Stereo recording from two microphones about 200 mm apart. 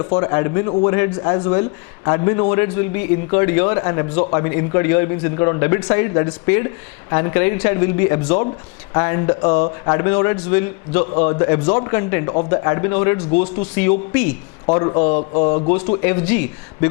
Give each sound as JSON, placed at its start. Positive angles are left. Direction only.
{"t": 0.0, "sound": "a man's voice", "side_deg": 25}
{"t": 14.7, "sound": "a man's voice", "side_deg": 30}
{"t": 16.0, "sound": "speech", "side_deg": 15}